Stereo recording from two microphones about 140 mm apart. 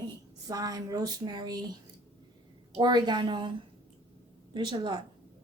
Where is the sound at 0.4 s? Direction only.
25° right (ahead or behind).